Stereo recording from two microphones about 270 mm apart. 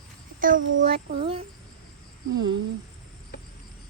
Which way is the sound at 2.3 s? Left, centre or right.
Right.